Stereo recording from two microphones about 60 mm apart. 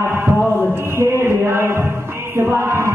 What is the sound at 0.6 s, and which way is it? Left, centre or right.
Music, right.